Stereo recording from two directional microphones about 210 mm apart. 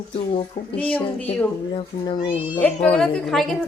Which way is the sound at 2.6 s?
5° left (ahead or behind).